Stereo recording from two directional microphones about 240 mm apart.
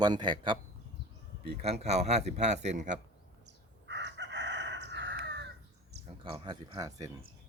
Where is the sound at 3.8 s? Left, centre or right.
Right.